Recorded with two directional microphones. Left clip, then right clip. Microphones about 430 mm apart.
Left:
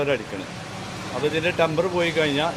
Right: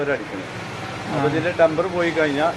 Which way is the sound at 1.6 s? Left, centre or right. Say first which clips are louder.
Right 6 dB; left.